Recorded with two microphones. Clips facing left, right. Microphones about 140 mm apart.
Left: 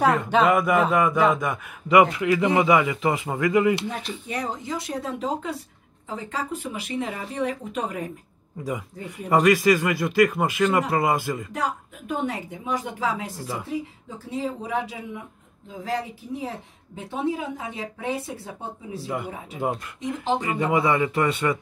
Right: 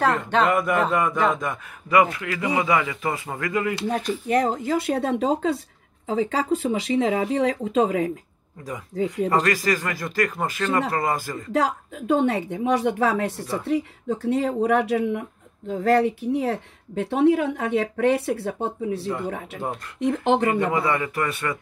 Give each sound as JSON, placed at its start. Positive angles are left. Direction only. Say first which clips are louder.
{"t": 0.0, "sound": "speech", "louder": "left 1 dB", "side_deg": 10}
{"t": 1.9, "sound": "a man's voice", "louder": "left 3 dB", "side_deg": 20}
{"t": 3.9, "sound": "speech", "louder": "right 9 dB", "side_deg": -45}
{"t": 9.3, "sound": "a man's voice", "louder": "left 8 dB", "side_deg": 15}
{"t": 11.5, "sound": "a woman's voice", "louder": "right 5 dB", "side_deg": -90}
{"t": 19.0, "sound": "a man's voice", "louder": "right 3 dB", "side_deg": 10}
{"t": 20.0, "sound": "speech", "louder": "right 8 dB", "side_deg": -60}
{"t": 20.7, "sound": "speech", "louder": "left 2 dB", "side_deg": 20}